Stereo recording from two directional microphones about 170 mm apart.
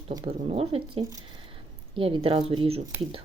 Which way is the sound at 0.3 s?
35° right (ahead or behind).